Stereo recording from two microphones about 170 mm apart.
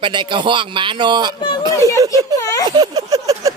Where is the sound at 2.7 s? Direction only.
25° right (ahead or behind).